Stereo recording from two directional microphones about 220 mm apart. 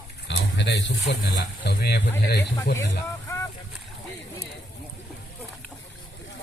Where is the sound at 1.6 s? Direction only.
45° left (ahead or behind).